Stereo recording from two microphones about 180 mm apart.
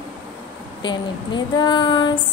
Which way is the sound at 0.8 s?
25° left (ahead or behind).